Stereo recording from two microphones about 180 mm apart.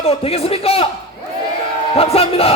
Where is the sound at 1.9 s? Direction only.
35° left (ahead or behind).